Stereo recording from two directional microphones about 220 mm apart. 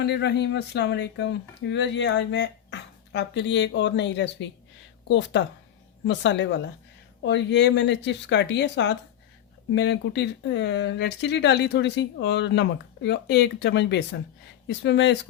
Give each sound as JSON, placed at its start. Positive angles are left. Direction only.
{"t": 0.0, "sound": "speech", "side_deg": 50}